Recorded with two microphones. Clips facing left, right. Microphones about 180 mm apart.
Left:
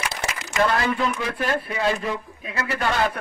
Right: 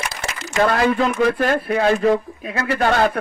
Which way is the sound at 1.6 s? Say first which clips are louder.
Right 8 dB; 60° right (ahead or behind).